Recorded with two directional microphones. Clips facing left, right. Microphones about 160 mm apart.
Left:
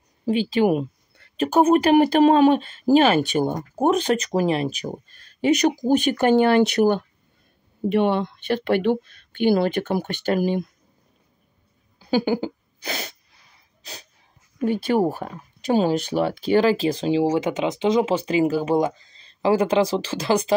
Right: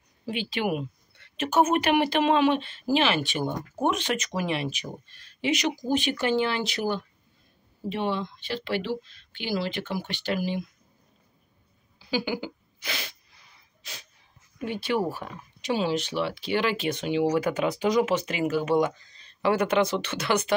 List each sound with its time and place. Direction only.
0.2 s speech: 40° left (ahead or behind)
12.0 s speech: 50° left (ahead or behind)
14.6 s speech: 45° left (ahead or behind)
17.4 s speech: 20° left (ahead or behind)